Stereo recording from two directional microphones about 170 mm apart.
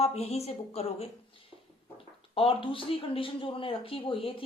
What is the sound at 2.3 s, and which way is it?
Speech, 30° left (ahead or behind).